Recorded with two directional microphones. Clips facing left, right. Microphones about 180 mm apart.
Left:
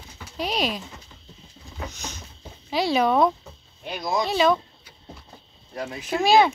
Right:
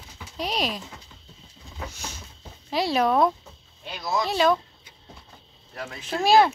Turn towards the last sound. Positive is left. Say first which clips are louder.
# even
turn(degrees=0)  # may be behind; listen again after turning